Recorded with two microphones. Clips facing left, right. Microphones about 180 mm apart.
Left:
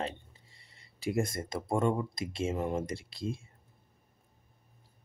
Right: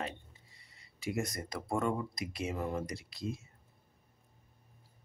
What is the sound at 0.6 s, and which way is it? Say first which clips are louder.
Speech: left 1 dB; 30° left (ahead or behind).